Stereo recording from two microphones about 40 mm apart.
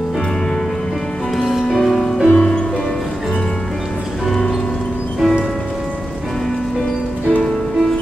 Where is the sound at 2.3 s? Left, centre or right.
Centre.